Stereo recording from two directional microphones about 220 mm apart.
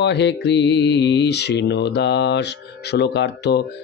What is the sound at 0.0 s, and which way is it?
Mantra, 50° left (ahead or behind).